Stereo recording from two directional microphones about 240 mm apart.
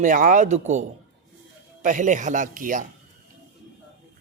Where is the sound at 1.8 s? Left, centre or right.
Right.